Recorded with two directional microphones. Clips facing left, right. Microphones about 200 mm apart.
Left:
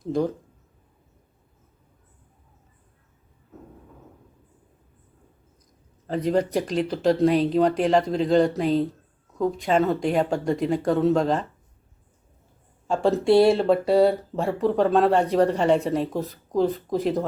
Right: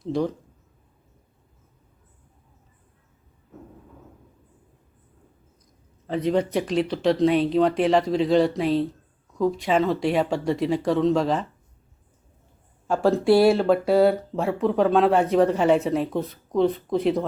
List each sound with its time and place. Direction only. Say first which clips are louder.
0.0 s speech: left 1 dB; centre (ahead or behind)
6.1 s speech: even; centre (ahead or behind)
12.9 s speech: even; 5° right (ahead or behind)